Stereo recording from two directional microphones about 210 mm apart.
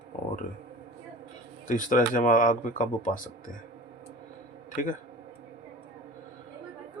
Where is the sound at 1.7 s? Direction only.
40° left (ahead or behind).